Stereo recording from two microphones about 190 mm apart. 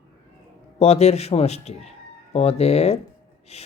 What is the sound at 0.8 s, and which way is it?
Speech, 35° left (ahead or behind).